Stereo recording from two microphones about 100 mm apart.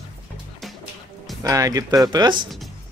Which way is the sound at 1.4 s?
35° right (ahead or behind).